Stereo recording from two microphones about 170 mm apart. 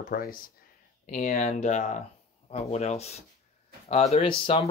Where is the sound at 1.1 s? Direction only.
45° left (ahead or behind).